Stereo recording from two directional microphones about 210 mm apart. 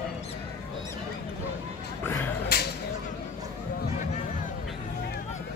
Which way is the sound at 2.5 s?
50° left (ahead or behind).